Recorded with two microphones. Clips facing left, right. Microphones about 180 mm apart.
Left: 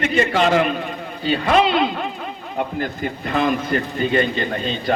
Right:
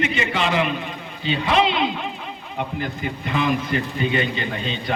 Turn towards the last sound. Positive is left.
turn(degrees=40)  # may be behind; listen again after turning